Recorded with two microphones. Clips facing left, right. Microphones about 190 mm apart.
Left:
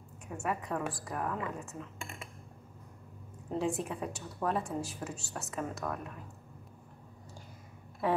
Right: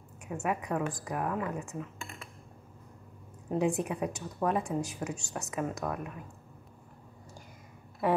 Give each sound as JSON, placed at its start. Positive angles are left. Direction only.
{"t": 0.4, "sound": "speech", "side_deg": -15}
{"t": 3.4, "sound": "speech", "side_deg": -15}